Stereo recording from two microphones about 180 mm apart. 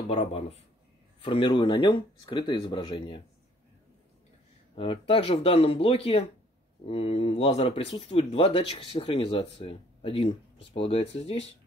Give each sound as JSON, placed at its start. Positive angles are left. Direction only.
{"t": 0.1, "sound": "speech", "side_deg": 35}
{"t": 1.2, "sound": "speech", "side_deg": 25}
{"t": 4.7, "sound": "speech", "side_deg": 30}